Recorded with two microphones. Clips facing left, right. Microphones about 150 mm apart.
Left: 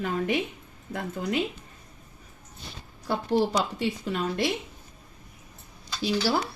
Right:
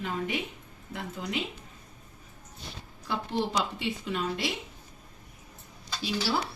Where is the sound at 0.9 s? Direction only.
50° left (ahead or behind).